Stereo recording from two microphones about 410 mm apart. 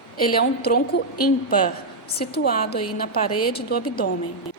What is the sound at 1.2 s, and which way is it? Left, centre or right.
A woman's voice, centre.